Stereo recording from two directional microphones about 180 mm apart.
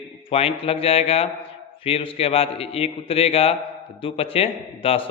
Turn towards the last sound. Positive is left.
turn(degrees=30)  # may be behind; listen again after turning